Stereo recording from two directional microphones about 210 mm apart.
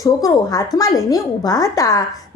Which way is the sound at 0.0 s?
15° left (ahead or behind).